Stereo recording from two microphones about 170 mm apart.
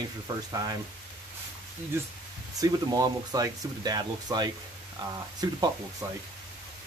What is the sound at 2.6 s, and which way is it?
Speech, 20° right (ahead or behind).